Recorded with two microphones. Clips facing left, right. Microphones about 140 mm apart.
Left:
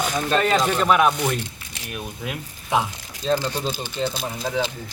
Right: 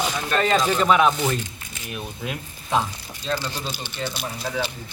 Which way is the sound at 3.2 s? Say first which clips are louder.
Left 5 dB; 45° left (ahead or behind).